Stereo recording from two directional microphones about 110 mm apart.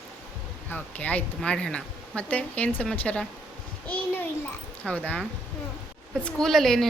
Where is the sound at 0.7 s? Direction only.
15° left (ahead or behind).